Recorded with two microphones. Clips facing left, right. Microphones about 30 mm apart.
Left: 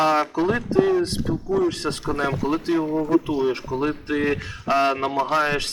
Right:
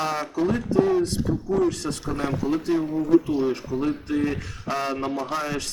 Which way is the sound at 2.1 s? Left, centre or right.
Left.